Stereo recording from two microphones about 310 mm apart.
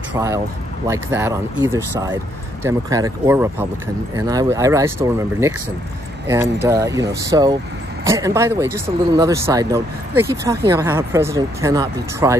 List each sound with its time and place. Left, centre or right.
0.8 s speech: centre